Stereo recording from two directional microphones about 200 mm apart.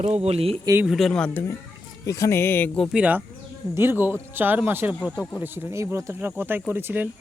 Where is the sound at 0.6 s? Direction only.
10° right (ahead or behind).